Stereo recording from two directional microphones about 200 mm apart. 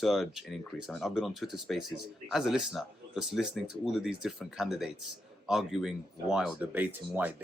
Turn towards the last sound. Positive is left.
turn(degrees=-10)  # may be behind; listen again after turning